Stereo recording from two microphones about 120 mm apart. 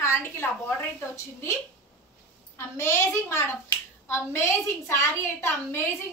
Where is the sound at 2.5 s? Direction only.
25° left (ahead or behind).